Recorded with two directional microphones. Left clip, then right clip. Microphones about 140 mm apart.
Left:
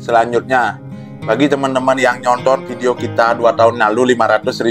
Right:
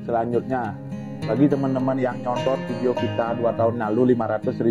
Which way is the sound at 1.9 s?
15° left (ahead or behind).